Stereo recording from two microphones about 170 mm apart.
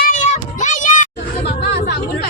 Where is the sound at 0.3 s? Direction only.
45° left (ahead or behind).